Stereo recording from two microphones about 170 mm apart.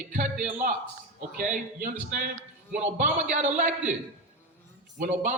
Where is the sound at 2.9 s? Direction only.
50° right (ahead or behind).